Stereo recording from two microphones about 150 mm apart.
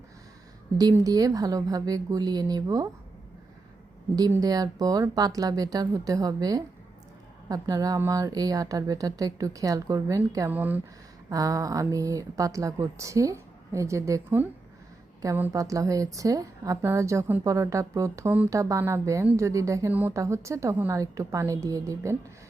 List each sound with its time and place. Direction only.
0.9 s a woman's voice: 25° right (ahead or behind)
4.3 s a woman's voice: 25° right (ahead or behind)
11.3 s a woman's voice: 25° right (ahead or behind)